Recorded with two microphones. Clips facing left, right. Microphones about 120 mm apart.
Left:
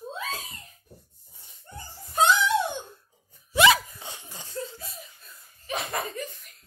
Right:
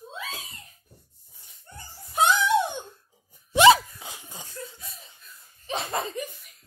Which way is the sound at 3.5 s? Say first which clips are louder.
Right 4 dB; 30° right (ahead or behind).